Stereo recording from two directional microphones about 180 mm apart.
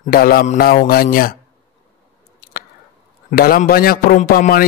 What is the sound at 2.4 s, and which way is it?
Squish, 50° left (ahead or behind).